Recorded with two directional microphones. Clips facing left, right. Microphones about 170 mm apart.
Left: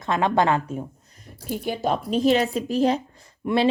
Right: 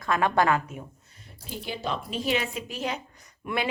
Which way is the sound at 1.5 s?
50° left (ahead or behind).